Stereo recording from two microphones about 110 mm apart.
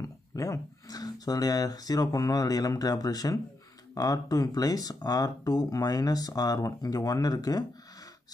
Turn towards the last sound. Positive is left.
turn(degrees=35)  # may be behind; listen again after turning